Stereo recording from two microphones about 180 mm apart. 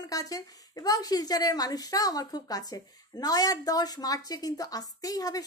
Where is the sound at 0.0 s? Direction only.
20° left (ahead or behind).